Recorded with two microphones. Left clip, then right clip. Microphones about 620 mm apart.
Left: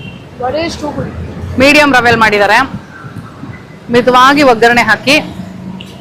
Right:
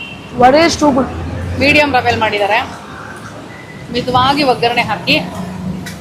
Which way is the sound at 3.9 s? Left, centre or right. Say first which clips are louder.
Left 7 dB; left.